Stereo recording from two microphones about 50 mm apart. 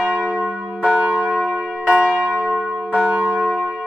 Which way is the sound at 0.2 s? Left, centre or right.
Centre.